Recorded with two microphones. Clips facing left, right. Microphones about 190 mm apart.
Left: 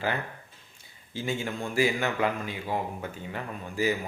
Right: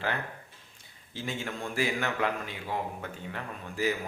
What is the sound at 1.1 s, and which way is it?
Speech, centre (ahead or behind).